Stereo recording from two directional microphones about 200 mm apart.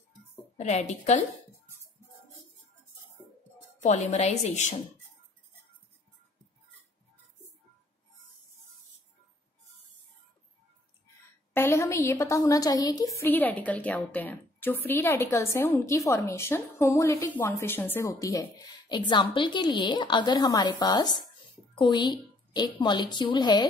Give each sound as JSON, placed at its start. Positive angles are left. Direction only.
{"t": 0.6, "sound": "speech", "side_deg": 35}
{"t": 3.8, "sound": "speech", "side_deg": 35}
{"t": 11.5, "sound": "a woman's voice", "side_deg": 10}